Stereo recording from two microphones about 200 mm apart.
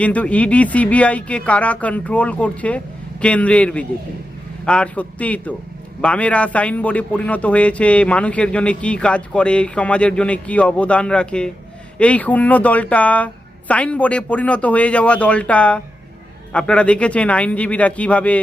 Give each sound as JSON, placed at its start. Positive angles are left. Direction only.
{"t": 0.0, "sound": "a man's voice", "side_deg": 5}